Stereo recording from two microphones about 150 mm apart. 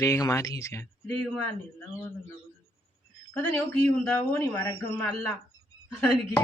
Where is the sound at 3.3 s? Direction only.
10° left (ahead or behind).